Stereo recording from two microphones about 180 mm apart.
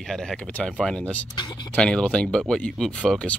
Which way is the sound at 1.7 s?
5° left (ahead or behind).